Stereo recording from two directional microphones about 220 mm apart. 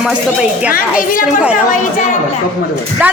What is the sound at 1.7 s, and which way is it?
Speech, 35° left (ahead or behind).